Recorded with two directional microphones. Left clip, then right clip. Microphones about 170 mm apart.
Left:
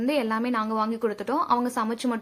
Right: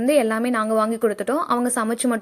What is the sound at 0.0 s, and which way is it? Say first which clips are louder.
A woman's voice: right 7 dB; 25° right (ahead or behind).